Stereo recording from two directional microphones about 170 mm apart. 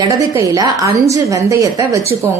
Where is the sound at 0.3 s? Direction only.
20° right (ahead or behind).